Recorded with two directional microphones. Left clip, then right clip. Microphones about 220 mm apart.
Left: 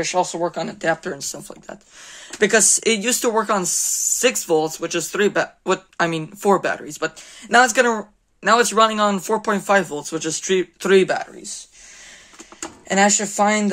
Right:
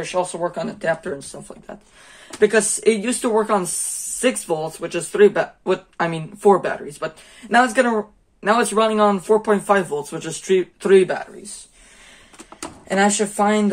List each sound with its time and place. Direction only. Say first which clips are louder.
0.0 s speech: left 2 dB; 50° left (ahead or behind)
12.8 s speech: left 1 dB; 50° left (ahead or behind)